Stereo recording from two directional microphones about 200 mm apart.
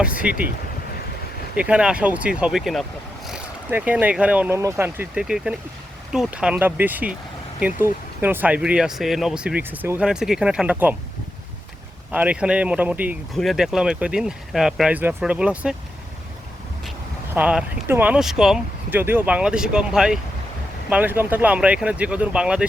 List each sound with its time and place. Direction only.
0.0 s speech: 5° right (ahead or behind)
1.5 s speech: 5° right (ahead or behind)
12.1 s speech: 5° right (ahead or behind)
17.3 s speech: 5° right (ahead or behind)